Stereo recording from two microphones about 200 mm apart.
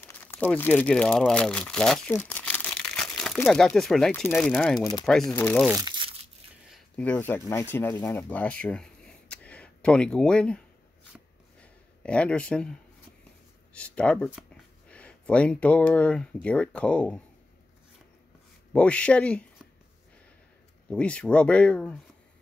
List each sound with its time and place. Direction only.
0.0 s speech: 10° left (ahead or behind)
5.7 s crumpling: 20° right (ahead or behind)
6.7 s speech: 5° left (ahead or behind)
11.6 s a sound: 5° left (ahead or behind)
13.7 s speech: 5° left (ahead or behind)
18.7 s speech: 5° left (ahead or behind)
20.9 s speech: 5° left (ahead or behind)